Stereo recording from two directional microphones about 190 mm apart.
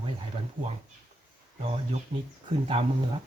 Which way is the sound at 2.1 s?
25° right (ahead or behind).